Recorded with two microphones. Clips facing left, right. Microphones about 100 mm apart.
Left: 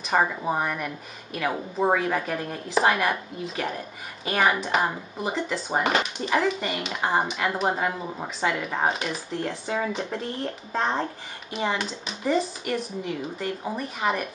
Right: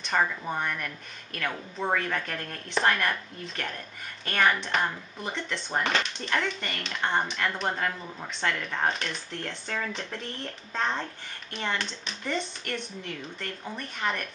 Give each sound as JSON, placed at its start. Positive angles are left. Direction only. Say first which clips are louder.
{"t": 0.1, "sound": "a woman's voice", "louder": "left 4 dB", "side_deg": 20}
{"t": 0.6, "sound": "a woman's voice", "louder": "left 4 dB", "side_deg": 5}
{"t": 10.8, "sound": "a child's voice", "louder": "left 4 dB", "side_deg": 35}
{"t": 11.5, "sound": "speech", "louder": "left 5 dB", "side_deg": 5}